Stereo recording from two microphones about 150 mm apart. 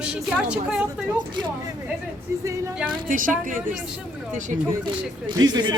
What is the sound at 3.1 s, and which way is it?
A woman's voice, 60° right (ahead or behind).